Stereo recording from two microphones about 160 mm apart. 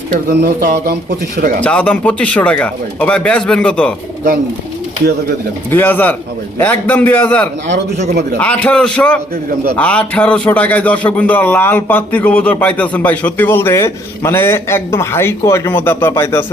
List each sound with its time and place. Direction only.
0.3 s speech: 80° right
1.4 s speech: 55° right (ahead or behind)
1.6 s a man's voice: 10° left (ahead or behind)
5.7 s a man's voice: 10° left (ahead or behind)
7.7 s a man's voice: 45° right (ahead or behind)
8.4 s a man's voice: 10° left (ahead or behind)